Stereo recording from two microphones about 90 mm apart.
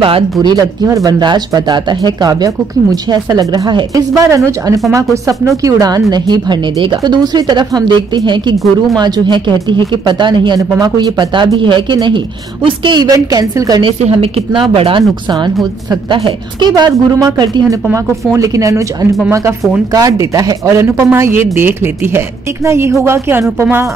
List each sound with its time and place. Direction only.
0.4 s speech: 55° right (ahead or behind)
0.8 s speech: 40° right (ahead or behind)
1.2 s speech: 55° right (ahead or behind)
7.0 s speech: 50° right (ahead or behind); by 13.0 s 65° right (ahead or behind)
13.0 s speech: 45° right (ahead or behind)
13.8 s a woman's voice: 75° right (ahead or behind); by 17.6 s 55° right (ahead or behind)
18.3 s speech: 40° right (ahead or behind)
20.8 s speech: 30° right (ahead or behind)